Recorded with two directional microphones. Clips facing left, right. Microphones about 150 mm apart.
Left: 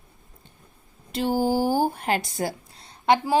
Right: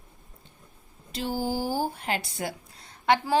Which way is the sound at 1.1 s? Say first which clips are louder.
Left 6 dB; 55° left (ahead or behind).